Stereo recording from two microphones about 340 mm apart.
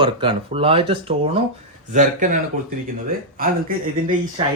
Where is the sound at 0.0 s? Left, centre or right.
Centre.